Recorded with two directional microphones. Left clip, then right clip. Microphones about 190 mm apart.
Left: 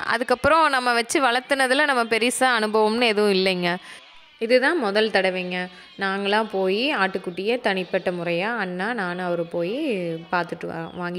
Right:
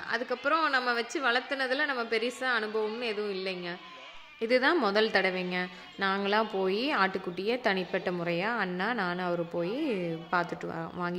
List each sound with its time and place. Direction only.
0.0 s a woman's voice: 60° left (ahead or behind)
4.4 s a woman's voice: 20° left (ahead or behind)